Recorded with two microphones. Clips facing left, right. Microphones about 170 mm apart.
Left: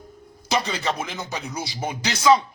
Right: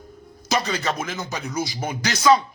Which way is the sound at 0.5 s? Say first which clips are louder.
Right 1 dB; 15° left (ahead or behind).